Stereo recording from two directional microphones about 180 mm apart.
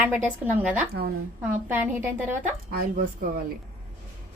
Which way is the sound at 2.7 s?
55° right (ahead or behind).